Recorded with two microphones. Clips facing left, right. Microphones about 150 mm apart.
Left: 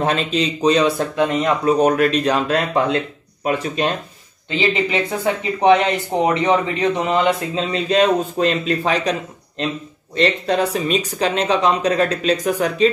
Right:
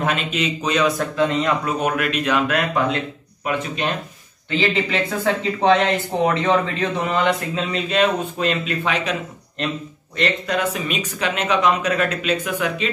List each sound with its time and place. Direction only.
0.0 s speech: 35° left (ahead or behind)
1.2 s speech: 15° left (ahead or behind)
1.7 s speech: 35° left (ahead or behind)
4.5 s speech: 20° left (ahead or behind); by 9.1 s 35° left (ahead or behind)
10.1 s speech: 30° left (ahead or behind)